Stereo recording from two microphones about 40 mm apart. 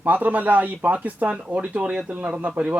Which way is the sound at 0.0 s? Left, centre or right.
Right.